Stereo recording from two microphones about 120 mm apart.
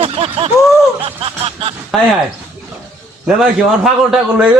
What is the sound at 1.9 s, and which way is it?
Speech, centre (ahead or behind).